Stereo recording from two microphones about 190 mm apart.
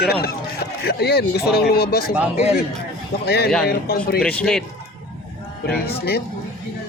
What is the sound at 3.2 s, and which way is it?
Speech, 55° left (ahead or behind).